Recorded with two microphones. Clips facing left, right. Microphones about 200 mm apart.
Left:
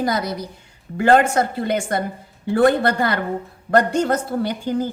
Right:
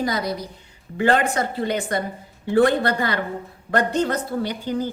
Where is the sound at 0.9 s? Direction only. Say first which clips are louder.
Left 4 dB; 45° left (ahead or behind).